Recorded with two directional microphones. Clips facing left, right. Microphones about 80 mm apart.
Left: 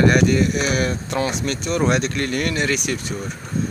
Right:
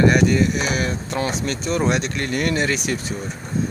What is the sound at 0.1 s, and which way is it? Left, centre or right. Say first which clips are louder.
Speech: even; right.